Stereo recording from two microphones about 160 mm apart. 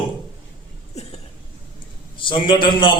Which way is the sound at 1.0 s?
40° left (ahead or behind).